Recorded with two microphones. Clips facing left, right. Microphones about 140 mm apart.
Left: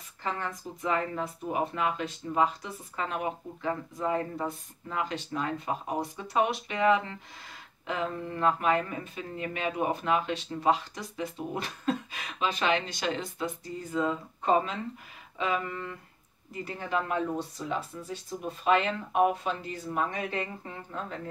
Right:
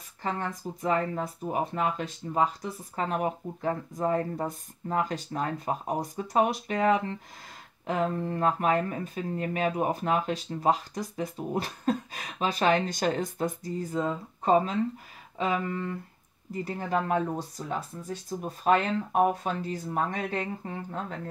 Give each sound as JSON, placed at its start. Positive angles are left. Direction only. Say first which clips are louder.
{"t": 0.2, "sound": "speech", "louder": "right 2 dB", "side_deg": -35}